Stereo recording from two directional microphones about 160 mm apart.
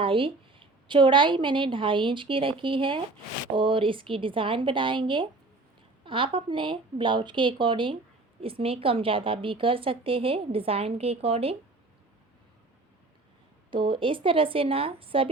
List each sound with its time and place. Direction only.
0.0 s a woman's voice: 35° right (ahead or behind)
13.7 s a woman's voice: 30° right (ahead or behind)